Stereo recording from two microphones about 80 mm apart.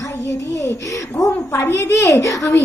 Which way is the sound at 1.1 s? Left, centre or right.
Left.